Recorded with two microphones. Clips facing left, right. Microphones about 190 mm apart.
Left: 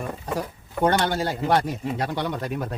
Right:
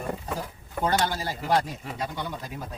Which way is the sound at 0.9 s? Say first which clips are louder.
Left 4 dB; 65° left (ahead or behind).